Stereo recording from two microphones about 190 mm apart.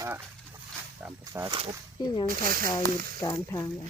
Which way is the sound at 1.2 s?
20° right (ahead or behind).